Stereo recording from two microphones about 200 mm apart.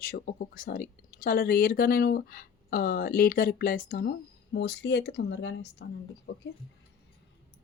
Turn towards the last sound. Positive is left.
turn(degrees=60)  # may be behind; listen again after turning